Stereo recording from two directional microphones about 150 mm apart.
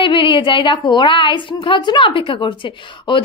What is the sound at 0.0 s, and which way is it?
A woman's voice, 35° left (ahead or behind).